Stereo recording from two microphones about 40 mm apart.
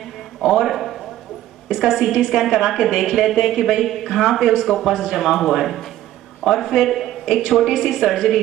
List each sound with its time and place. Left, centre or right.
0.5 s speech: centre